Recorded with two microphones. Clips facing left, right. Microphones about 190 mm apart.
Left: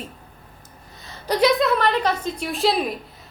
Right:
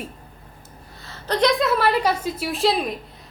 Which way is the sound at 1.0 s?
10° left (ahead or behind).